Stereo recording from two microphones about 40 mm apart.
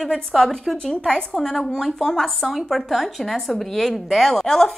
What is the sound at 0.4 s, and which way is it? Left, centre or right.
A woman's voice, centre.